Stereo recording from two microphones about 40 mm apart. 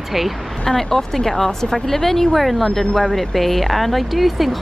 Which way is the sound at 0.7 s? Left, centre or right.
Centre.